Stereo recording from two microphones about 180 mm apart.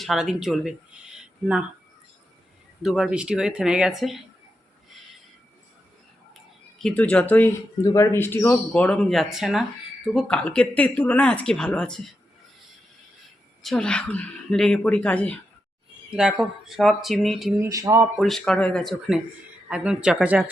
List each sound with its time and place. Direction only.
0.0 s a woman's voice: centre (ahead or behind)
1.1 s a sound: 5° right (ahead or behind)
2.8 s a woman's voice: centre (ahead or behind)
6.7 s speech: 5° left (ahead or behind)
13.6 s a woman's voice: 5° left (ahead or behind)
17.6 s speech: 20° right (ahead or behind)
18.2 s a woman's voice: centre (ahead or behind)